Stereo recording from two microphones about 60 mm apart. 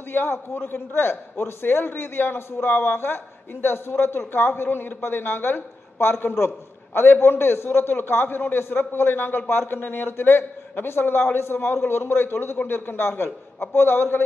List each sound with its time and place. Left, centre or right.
0.1 s a man's voice: left